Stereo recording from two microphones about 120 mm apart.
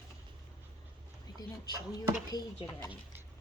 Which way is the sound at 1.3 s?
35° left (ahead or behind).